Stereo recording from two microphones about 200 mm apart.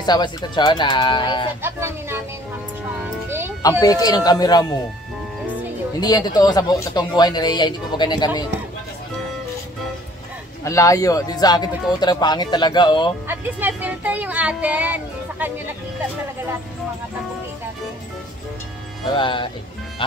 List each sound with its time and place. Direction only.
0.0 s speech: 20° left (ahead or behind)
1.6 s speech: 10° right (ahead or behind)
3.3 s music: 10° right (ahead or behind)
3.8 s speech: 20° left (ahead or behind)
5.9 s speech: 20° left (ahead or behind)
10.6 s speech: 15° left (ahead or behind)
13.3 s speech: 10° right (ahead or behind)
19.1 s speech: 25° left (ahead or behind)